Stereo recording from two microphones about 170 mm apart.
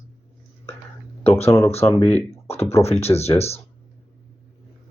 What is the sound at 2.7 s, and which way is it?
Speech, 40° left (ahead or behind).